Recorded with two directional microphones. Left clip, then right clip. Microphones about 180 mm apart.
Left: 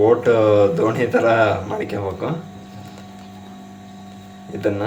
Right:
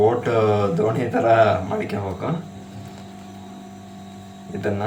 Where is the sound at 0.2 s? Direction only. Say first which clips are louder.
Left 5 dB; 35° left (ahead or behind).